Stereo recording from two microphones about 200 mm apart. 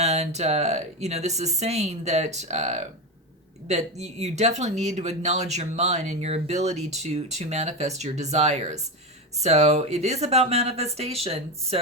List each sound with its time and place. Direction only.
0.0 s speech: 35° right (ahead or behind)